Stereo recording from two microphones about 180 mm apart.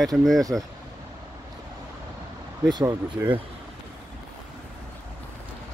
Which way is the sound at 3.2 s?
15° right (ahead or behind).